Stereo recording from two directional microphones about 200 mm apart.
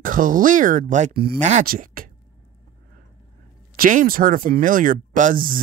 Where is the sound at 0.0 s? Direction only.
40° right (ahead or behind).